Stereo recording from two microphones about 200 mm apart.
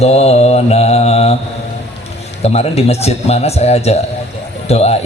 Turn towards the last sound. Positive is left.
turn(degrees=30)  # may be behind; listen again after turning